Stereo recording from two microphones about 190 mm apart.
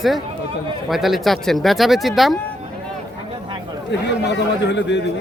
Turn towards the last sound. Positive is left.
turn(degrees=70)  # may be behind; listen again after turning